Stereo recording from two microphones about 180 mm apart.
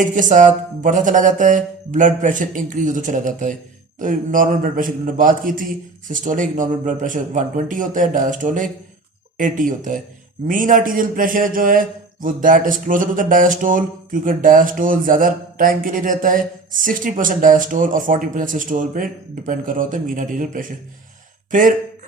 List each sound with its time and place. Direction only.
0.1 s a man's voice: 45° right (ahead or behind)